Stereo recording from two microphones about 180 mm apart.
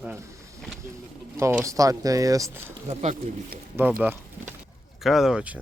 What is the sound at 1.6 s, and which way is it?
Speech, 20° right (ahead or behind).